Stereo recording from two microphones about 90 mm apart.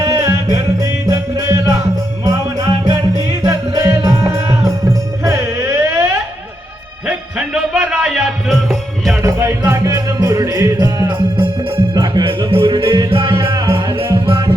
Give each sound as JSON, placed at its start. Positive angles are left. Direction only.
{"t": 0.0, "sound": "music", "side_deg": -40}
{"t": 3.8, "sound": "music", "side_deg": -35}
{"t": 7.3, "sound": "music", "side_deg": -5}
{"t": 9.2, "sound": "music", "side_deg": -30}
{"t": 9.8, "sound": "music", "side_deg": -45}
{"t": 12.3, "sound": "music", "side_deg": -80}